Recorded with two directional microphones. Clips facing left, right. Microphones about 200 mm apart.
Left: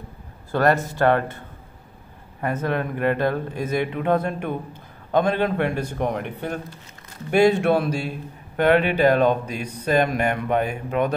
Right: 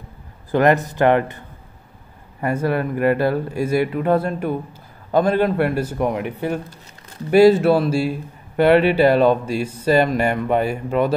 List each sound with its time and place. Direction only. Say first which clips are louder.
0.5 s a man's voice: right 4 dB; 15° right (ahead or behind)
2.4 s a man's voice: right 4 dB; 10° right (ahead or behind)